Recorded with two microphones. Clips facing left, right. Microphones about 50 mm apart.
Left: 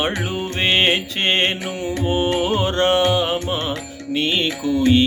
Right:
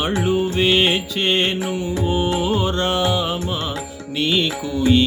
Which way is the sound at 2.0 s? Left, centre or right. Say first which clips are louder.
Left 2 dB; left.